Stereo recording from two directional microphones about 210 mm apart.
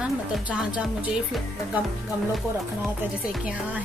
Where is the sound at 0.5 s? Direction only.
5° right (ahead or behind).